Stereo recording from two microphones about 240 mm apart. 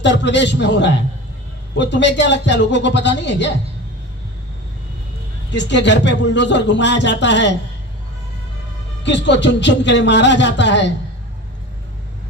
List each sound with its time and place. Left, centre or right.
0.0 s speech: left
5.5 s speech: left
9.0 s speech: left